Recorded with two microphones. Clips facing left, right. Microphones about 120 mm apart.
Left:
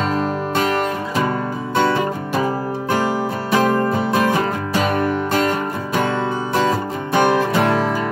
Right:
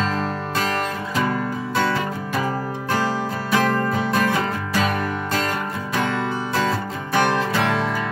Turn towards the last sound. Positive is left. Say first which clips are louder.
# left 4 dB
turn(degrees=15)  # may be behind; listen again after turning